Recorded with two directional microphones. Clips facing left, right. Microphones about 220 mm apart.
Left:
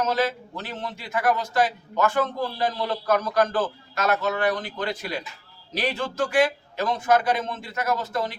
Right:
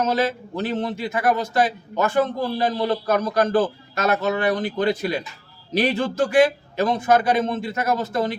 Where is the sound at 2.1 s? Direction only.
15° right (ahead or behind).